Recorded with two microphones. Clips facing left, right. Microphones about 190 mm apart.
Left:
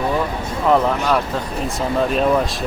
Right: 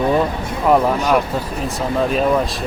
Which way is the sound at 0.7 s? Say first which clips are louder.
Right 2 dB; 10° right (ahead or behind).